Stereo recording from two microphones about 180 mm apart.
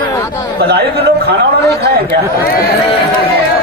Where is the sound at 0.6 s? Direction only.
65° right (ahead or behind).